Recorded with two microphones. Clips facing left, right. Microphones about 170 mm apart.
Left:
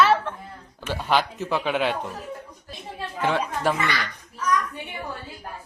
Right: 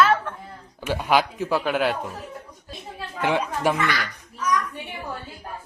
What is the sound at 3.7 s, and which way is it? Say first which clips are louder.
Speech: right 2 dB; 15° right (ahead or behind).